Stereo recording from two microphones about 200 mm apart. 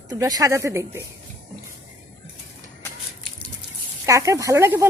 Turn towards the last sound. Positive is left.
turn(degrees=-15)  # may be behind; listen again after turning